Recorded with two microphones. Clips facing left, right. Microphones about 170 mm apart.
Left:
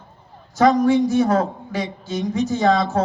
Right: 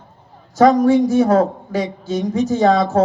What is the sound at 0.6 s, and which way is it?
Speech, 45° right (ahead or behind).